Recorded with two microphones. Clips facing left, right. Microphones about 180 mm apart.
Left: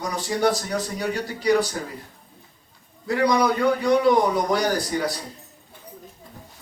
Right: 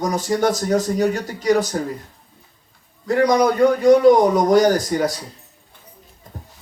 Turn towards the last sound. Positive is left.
turn(degrees=-45)  # may be behind; listen again after turning